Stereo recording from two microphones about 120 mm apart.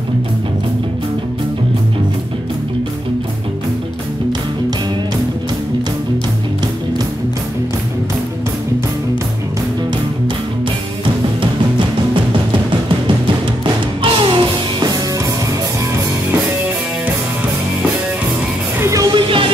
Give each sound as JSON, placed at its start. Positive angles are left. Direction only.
{"t": 14.0, "sound": "music", "side_deg": -45}
{"t": 18.8, "sound": "music", "side_deg": -25}
{"t": 19.1, "sound": "music", "side_deg": -45}